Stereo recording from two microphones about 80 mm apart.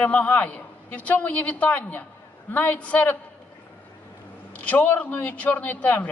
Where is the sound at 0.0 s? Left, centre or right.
Left.